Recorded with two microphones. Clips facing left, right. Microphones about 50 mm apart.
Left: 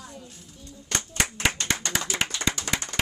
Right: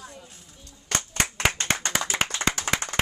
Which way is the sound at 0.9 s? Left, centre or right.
Right.